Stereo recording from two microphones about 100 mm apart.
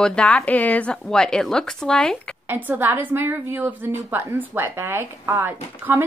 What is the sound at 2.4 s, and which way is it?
A woman's voice, 15° right (ahead or behind).